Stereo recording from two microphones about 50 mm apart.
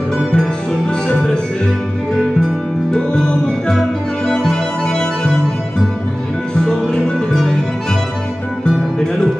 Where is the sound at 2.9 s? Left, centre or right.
Centre.